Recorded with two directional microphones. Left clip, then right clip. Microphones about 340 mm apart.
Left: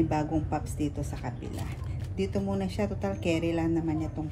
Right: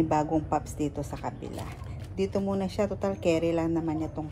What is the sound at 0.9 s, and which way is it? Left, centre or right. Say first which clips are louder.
A woman's voice: right 3 dB; centre.